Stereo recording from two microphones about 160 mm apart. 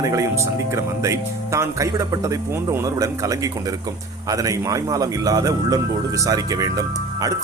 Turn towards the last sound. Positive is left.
turn(degrees=-20)  # may be behind; listen again after turning